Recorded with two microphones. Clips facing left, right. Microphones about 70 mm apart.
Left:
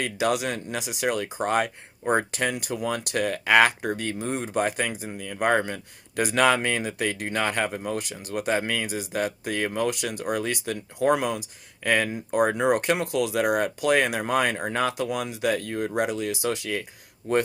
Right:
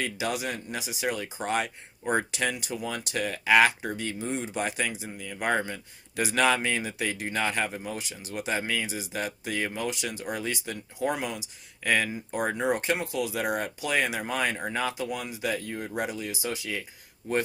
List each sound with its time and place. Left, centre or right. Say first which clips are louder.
0.0 s speech: left 5 dB; left